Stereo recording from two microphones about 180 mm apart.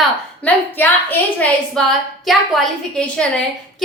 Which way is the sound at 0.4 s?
10° left (ahead or behind).